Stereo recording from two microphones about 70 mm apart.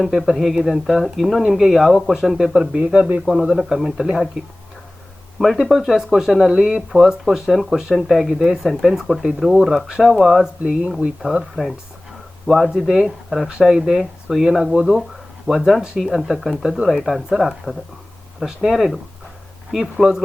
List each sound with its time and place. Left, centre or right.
0.0 s speech: centre
3.2 s speech: centre
5.4 s speech: centre
10.6 s speech: centre
12.5 s speech: centre